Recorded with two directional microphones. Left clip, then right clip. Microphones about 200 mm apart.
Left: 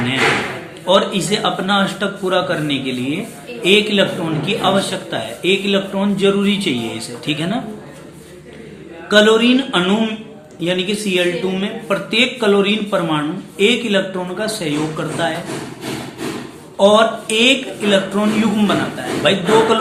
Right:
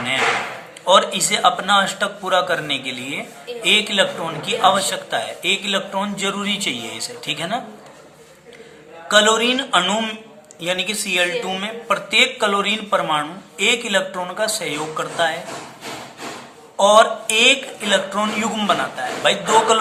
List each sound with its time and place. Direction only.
0.9 s speech: 25° right (ahead or behind)
9.0 s speech: 30° right (ahead or behind)
16.7 s speech: 25° right (ahead or behind)